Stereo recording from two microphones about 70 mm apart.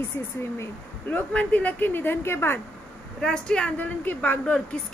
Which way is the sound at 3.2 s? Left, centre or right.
Centre.